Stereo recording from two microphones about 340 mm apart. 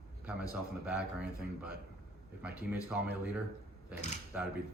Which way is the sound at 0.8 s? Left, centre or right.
Centre.